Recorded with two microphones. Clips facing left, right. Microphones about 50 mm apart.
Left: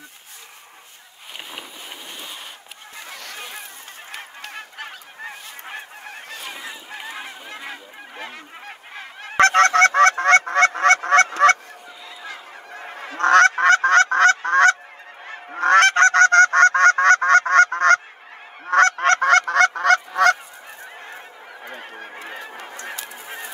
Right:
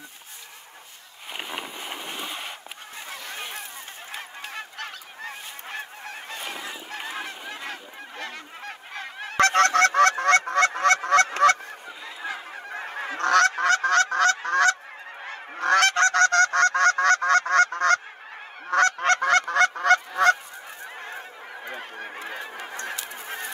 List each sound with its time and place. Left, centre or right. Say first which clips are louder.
4.7 s goose: left 1 dB; centre
6.9 s goose: right 2 dB; centre
9.4 s goose: left 5 dB; left
12.3 s goose: right 4 dB; right
13.2 s honk: left 6 dB; left
15.5 s goose: left 6 dB; left
18.7 s honk: left 5 dB; left
22.8 s goose: even; centre